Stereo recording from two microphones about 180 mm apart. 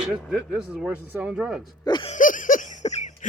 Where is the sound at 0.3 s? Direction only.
5° right (ahead or behind).